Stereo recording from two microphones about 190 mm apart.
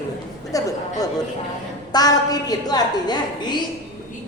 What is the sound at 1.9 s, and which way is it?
Speech, 20° left (ahead or behind).